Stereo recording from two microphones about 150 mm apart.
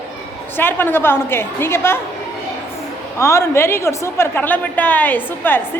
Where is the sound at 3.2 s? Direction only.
20° left (ahead or behind).